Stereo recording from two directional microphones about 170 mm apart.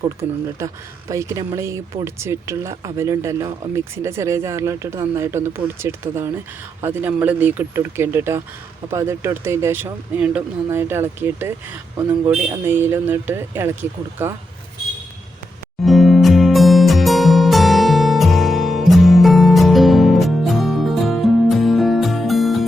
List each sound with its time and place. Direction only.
0.2 s speech: 20° right (ahead or behind)
15.8 s music: centre (ahead or behind)